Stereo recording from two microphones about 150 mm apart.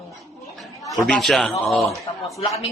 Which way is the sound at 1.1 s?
Centre (ahead or behind).